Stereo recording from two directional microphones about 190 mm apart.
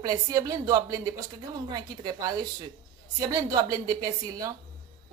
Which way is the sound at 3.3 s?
20° right (ahead or behind).